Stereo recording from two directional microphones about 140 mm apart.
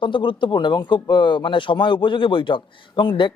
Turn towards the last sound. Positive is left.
turn(degrees=35)  # may be behind; listen again after turning